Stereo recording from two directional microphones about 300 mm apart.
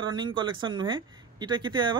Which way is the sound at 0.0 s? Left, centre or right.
Centre.